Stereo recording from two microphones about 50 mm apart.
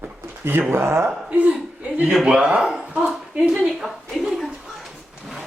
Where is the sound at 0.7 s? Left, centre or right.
Right.